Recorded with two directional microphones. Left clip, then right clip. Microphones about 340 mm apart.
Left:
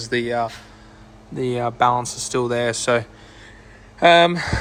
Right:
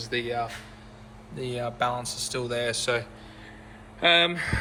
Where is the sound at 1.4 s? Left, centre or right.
Left.